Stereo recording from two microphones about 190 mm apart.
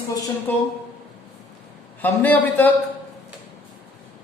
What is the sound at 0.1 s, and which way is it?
Speech, 20° left (ahead or behind).